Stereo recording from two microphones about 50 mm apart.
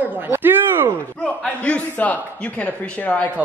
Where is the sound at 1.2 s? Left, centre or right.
Left.